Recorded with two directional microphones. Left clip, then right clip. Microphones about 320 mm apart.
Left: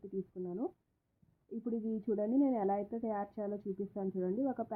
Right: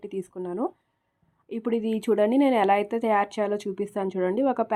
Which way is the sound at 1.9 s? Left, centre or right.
Centre.